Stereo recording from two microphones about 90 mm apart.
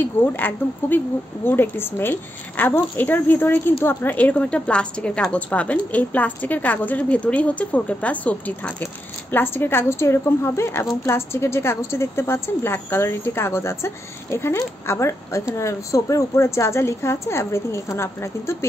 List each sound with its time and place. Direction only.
0.0 s speech: 25° left (ahead or behind)